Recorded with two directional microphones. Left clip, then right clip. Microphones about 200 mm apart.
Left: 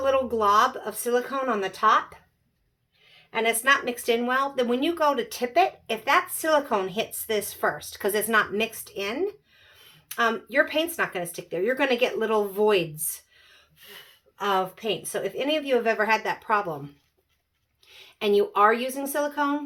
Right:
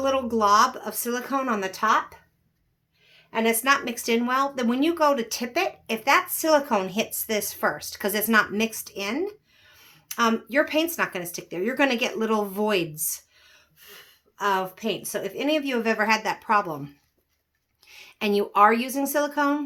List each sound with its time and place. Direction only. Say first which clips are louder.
0.0 s a woman's voice: even; 50° right (ahead or behind)
3.3 s a woman's voice: even; 45° right (ahead or behind)
14.3 s a woman's voice: right 1 dB; 35° right (ahead or behind)
17.8 s speech: left 2 dB; 50° right (ahead or behind)